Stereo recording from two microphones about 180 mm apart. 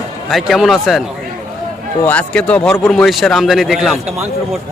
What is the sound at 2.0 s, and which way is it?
A man's voice, 5° left (ahead or behind).